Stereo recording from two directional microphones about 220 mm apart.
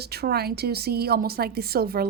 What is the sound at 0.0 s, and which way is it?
A woman's voice, 45° right (ahead or behind).